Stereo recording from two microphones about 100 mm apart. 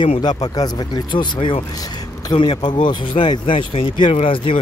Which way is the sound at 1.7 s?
40° left (ahead or behind).